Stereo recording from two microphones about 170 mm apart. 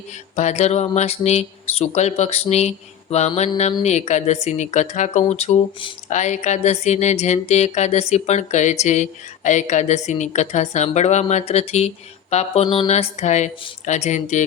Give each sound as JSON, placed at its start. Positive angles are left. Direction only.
{"t": 0.3, "sound": "speech", "side_deg": 40}
{"t": 12.6, "sound": "a sound", "side_deg": 25}
{"t": 12.9, "sound": "speech", "side_deg": 40}